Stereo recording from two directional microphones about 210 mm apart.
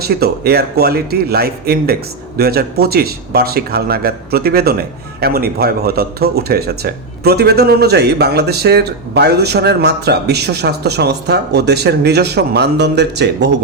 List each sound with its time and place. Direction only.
0.0 s a man's voice: 50° right (ahead or behind)